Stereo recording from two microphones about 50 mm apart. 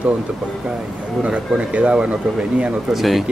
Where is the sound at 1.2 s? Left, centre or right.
Right.